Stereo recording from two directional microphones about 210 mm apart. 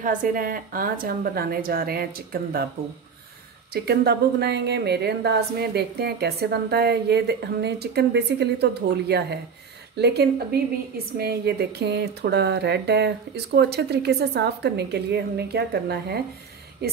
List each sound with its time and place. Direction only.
0.0 s a woman's voice: 40° right (ahead or behind)
3.7 s a woman's voice: 50° right (ahead or behind)